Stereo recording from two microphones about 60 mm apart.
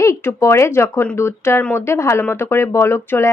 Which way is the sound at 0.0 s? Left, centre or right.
Left.